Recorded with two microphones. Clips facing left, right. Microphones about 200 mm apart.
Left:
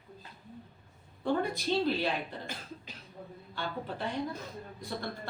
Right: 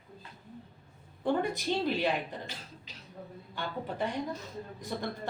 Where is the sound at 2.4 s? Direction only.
50° left (ahead or behind).